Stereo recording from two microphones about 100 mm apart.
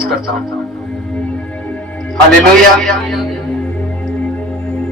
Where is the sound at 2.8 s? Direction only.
5° left (ahead or behind).